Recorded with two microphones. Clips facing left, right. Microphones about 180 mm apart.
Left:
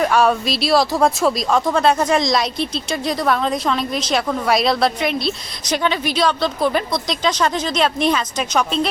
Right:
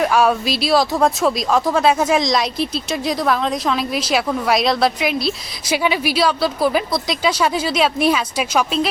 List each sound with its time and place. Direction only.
0.0 s speech: centre (ahead or behind)